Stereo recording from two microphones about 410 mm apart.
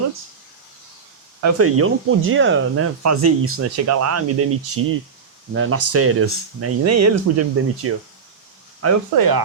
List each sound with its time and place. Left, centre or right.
1.4 s speech: right
9.1 s speech: right